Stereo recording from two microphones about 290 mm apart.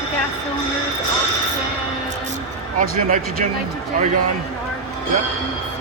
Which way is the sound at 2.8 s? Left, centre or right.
Right.